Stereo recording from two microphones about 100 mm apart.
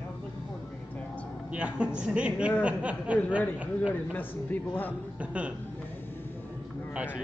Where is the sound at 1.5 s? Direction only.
10° right (ahead or behind).